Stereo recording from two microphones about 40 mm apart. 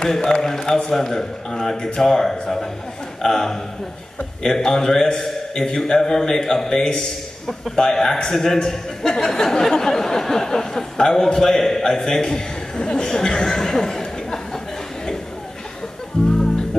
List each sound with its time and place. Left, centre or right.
0.0 s a man's voice: centre
16.2 s music: centre